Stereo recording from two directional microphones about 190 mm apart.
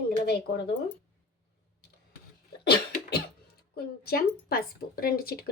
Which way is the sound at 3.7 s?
55° left (ahead or behind).